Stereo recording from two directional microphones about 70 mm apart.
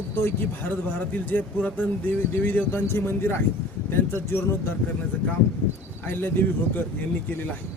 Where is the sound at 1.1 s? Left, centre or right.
Left.